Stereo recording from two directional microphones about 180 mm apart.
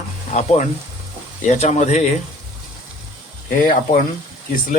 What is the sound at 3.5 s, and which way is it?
Speech, 50° left (ahead or behind).